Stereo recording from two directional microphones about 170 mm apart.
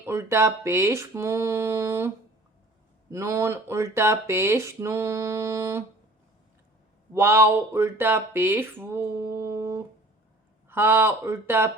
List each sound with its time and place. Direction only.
0.0 s speech: 15° right (ahead or behind)
7.1 s speech: 15° right (ahead or behind)